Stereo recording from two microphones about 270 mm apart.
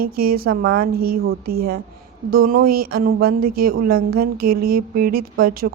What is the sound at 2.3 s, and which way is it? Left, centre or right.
Speech, right.